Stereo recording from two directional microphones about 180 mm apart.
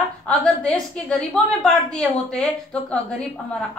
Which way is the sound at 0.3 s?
5° left (ahead or behind).